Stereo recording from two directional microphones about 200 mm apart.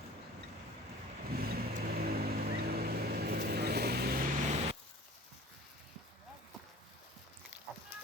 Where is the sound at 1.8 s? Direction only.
50° right (ahead or behind).